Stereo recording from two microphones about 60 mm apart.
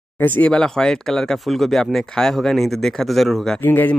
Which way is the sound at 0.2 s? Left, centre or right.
Left.